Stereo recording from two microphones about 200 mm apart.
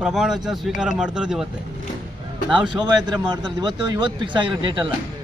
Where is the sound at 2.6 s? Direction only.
20° right (ahead or behind).